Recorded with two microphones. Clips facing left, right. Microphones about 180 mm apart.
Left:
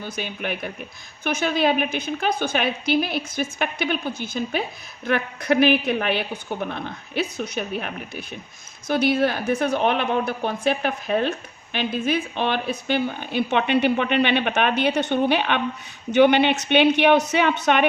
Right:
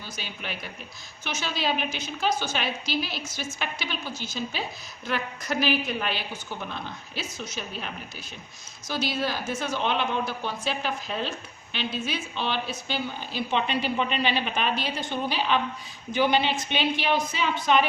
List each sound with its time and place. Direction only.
0.0 s a woman's voice: 55° left (ahead or behind)